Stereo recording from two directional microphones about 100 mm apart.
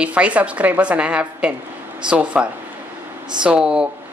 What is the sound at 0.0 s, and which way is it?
A woman's voice, 15° right (ahead or behind).